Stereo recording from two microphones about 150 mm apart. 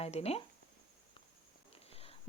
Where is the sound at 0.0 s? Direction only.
45° left (ahead or behind).